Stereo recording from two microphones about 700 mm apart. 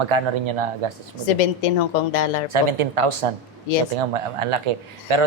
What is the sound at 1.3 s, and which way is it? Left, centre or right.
A woman's voice, left.